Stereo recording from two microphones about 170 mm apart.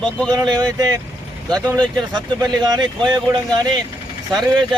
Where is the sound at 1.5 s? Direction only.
25° right (ahead or behind).